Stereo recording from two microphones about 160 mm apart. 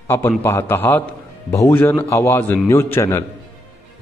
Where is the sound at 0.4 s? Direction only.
15° left (ahead or behind).